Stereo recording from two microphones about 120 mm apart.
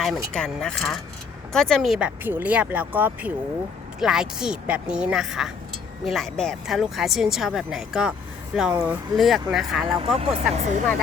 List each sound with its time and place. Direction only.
0.0 s speech: centre (ahead or behind)
10.2 s speech: 70° right (ahead or behind)